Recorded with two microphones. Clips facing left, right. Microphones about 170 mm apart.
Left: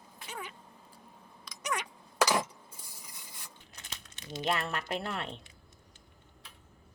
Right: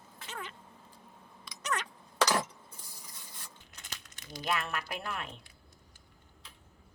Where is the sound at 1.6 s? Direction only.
10° left (ahead or behind).